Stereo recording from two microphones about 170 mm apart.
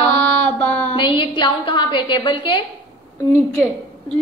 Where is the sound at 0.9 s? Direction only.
30° left (ahead or behind).